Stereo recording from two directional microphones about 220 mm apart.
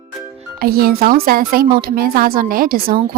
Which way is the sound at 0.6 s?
40° right (ahead or behind).